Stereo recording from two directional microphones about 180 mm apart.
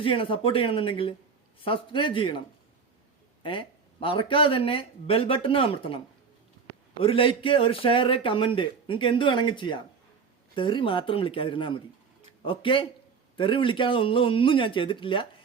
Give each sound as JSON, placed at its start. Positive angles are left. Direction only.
{"t": 0.0, "sound": "a man's voice", "side_deg": 30}
{"t": 3.4, "sound": "a man's voice", "side_deg": 30}